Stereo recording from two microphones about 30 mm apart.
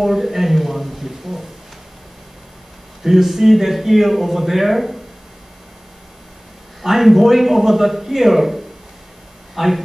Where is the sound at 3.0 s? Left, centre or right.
Centre.